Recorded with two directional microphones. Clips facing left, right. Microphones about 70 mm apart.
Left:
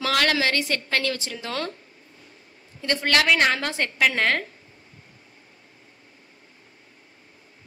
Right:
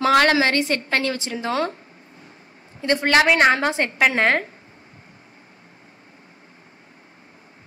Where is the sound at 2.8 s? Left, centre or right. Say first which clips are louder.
Right 5 dB; right.